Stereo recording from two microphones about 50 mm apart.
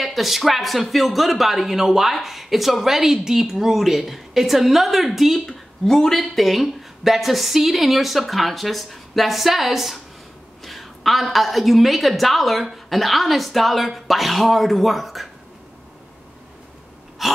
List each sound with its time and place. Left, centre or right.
0.0 s speech: centre
5.9 s speech: centre
17.2 s speech: centre